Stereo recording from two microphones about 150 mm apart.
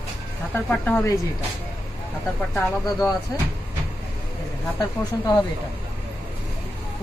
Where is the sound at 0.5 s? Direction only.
10° left (ahead or behind).